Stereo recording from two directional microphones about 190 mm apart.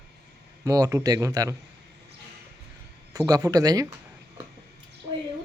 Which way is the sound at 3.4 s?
20° right (ahead or behind).